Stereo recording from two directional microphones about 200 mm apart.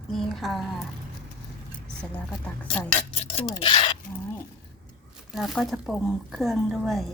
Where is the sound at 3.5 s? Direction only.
25° left (ahead or behind).